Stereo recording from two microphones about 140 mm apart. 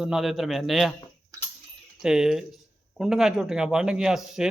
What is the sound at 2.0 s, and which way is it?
A man's voice, 5° right (ahead or behind).